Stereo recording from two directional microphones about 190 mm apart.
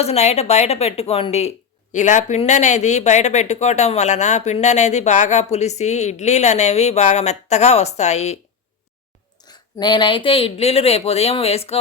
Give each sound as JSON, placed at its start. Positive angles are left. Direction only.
{"t": 0.0, "sound": "speech", "side_deg": 35}
{"t": 9.5, "sound": "speech", "side_deg": 20}